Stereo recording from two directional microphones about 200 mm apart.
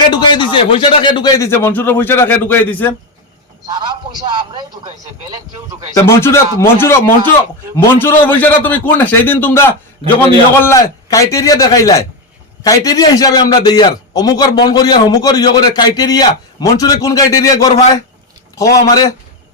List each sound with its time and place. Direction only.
0.0 s speech: 25° left (ahead or behind)
3.8 s a man's voice: 20° right (ahead or behind)
5.9 s a man's voice: 15° left (ahead or behind)